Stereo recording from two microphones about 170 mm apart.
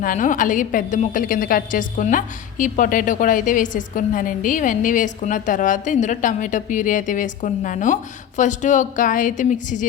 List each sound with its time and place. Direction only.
0.0 s a woman's voice: 50° left (ahead or behind)